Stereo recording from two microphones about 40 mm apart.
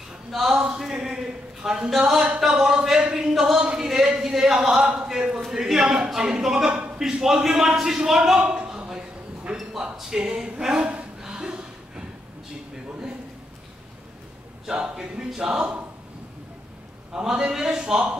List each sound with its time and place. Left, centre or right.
0.3 s a man's voice: centre
8.4 s a sound: right
9.9 s speech: centre
11.2 s a sound: right
14.7 s speech: centre
17.1 s a man's voice: centre